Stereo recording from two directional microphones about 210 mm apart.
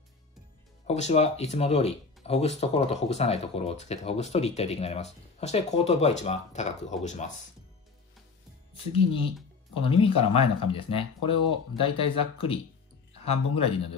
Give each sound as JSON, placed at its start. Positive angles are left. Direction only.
{"t": 0.8, "sound": "speech", "side_deg": 30}
{"t": 8.7, "sound": "speech", "side_deg": 25}
{"t": 11.8, "sound": "speech", "side_deg": 25}